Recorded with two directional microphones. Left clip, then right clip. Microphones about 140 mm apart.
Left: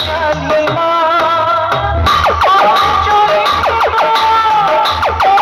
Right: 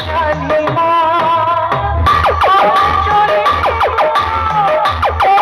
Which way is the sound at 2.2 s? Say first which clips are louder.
Left 1 dB; 30° right (ahead or behind).